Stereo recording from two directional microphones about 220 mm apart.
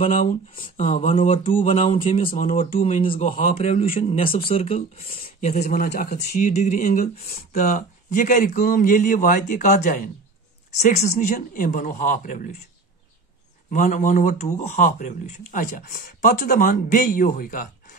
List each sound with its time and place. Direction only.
0.0 s speech: 30° left (ahead or behind)
6.4 s speech: 30° left (ahead or behind)
13.7 s speech: 35° left (ahead or behind)